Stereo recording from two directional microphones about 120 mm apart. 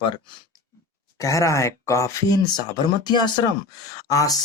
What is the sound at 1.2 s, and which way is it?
Speech, 25° left (ahead or behind).